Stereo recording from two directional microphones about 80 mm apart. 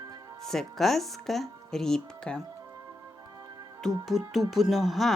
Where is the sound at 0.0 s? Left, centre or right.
Right.